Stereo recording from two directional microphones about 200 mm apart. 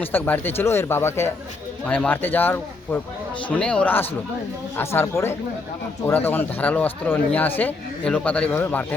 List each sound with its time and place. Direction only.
0.0 s a man's voice: 10° left (ahead or behind)